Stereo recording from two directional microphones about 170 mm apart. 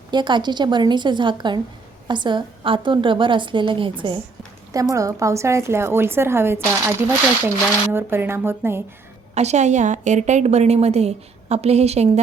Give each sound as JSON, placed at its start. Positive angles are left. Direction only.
{"t": 0.1, "sound": "a woman's voice", "side_deg": -25}
{"t": 4.7, "sound": "speech", "side_deg": -20}
{"t": 7.9, "sound": "speech", "side_deg": -15}
{"t": 9.3, "sound": "a woman's voice", "side_deg": -40}